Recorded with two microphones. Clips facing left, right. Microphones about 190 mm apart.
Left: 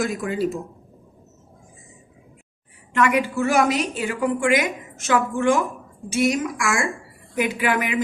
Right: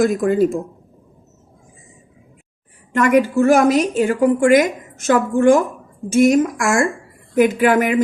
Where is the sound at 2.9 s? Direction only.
45° right (ahead or behind).